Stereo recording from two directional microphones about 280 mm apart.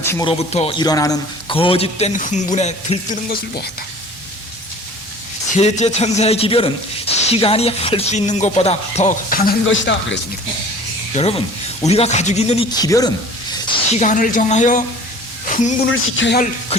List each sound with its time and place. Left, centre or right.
0.0 s a man's voice: centre; by 3.7 s left
5.5 s a man's voice: left
9.6 s speech: left
11.1 s a man's voice: left
13.9 s a man's voice: left
15.4 s a sound: left
15.9 s speech: left